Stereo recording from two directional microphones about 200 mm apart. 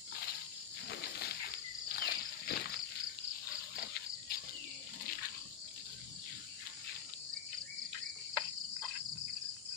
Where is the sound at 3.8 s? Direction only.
55° left (ahead or behind).